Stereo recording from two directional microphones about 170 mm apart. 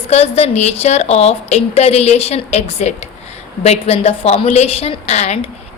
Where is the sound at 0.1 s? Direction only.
35° left (ahead or behind).